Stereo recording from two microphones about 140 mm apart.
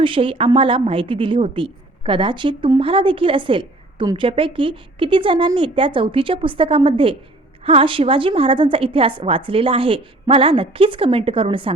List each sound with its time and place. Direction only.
0.0 s a woman's voice: 40° right (ahead or behind)